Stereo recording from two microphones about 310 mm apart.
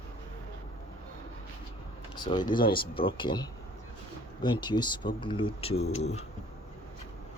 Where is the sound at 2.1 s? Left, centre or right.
Centre.